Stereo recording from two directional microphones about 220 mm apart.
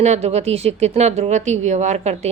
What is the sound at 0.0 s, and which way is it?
Speech, 30° right (ahead or behind).